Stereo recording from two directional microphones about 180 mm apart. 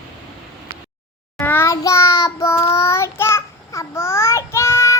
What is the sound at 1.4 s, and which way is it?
Child singing, 10° left (ahead or behind).